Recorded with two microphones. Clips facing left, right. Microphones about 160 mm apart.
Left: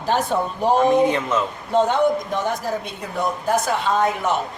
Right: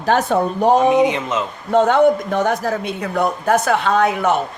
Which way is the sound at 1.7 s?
65° right (ahead or behind).